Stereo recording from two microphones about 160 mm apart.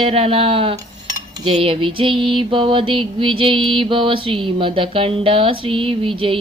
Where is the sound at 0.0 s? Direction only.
35° right (ahead or behind).